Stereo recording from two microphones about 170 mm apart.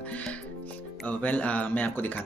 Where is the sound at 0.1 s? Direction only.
10° left (ahead or behind).